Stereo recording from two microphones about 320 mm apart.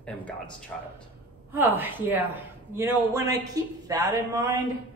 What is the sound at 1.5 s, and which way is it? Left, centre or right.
Speech, centre.